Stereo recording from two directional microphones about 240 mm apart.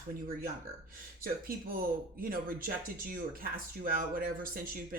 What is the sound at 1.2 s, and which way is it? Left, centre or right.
Speech, right.